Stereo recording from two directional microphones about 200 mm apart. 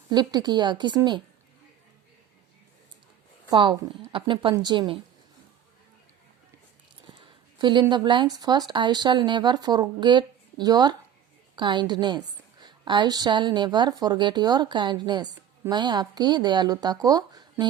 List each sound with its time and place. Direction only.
0.1 s a woman's voice: 20° right (ahead or behind)
3.5 s a woman's voice: 25° right (ahead or behind)
7.2 s a woman's voice: 25° right (ahead or behind)